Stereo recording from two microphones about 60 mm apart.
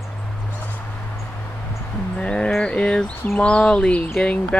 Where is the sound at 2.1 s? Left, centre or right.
Centre.